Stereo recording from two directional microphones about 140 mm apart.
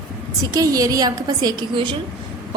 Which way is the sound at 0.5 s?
25° right (ahead or behind).